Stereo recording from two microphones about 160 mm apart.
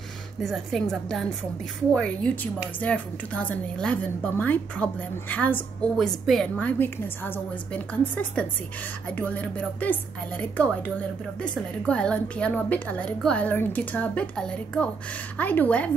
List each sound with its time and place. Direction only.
0.4 s a woman's voice: centre (ahead or behind)
6.6 s a woman's voice: 10° left (ahead or behind)